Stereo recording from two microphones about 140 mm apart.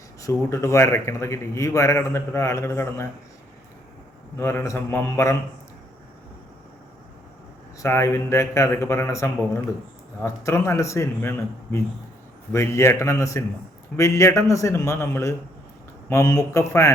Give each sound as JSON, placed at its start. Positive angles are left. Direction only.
{"t": 0.2, "sound": "a man's voice", "side_deg": 25}
{"t": 4.4, "sound": "a man's voice", "side_deg": 20}
{"t": 7.8, "sound": "a man's voice", "side_deg": 20}